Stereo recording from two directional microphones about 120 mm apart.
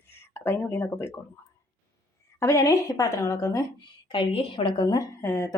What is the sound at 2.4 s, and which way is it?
Speech, 25° left (ahead or behind).